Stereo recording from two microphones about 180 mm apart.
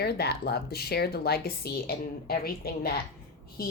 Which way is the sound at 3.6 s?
60° left (ahead or behind).